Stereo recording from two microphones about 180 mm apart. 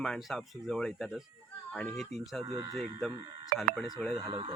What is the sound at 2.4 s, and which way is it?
Speech, 20° right (ahead or behind).